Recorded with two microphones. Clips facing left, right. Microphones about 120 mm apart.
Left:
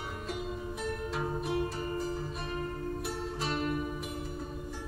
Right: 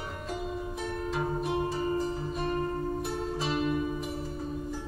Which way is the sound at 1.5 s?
30° right (ahead or behind).